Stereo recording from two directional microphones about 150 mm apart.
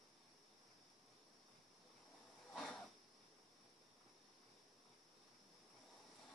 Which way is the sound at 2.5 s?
Centre (ahead or behind).